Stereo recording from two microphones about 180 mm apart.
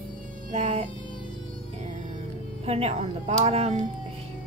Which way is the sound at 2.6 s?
35° right (ahead or behind).